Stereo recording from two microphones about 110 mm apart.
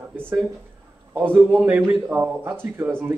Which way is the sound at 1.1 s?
15° right (ahead or behind).